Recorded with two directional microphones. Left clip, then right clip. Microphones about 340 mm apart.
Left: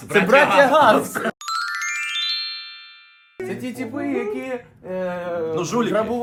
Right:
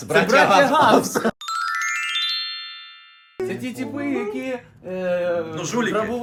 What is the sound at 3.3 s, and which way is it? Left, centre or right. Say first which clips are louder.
Speech: right 1 dB; centre.